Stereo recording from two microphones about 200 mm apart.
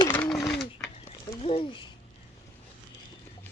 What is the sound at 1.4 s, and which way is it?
Speech, 25° left (ahead or behind).